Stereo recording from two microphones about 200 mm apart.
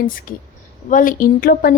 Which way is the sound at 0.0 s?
45° left (ahead or behind).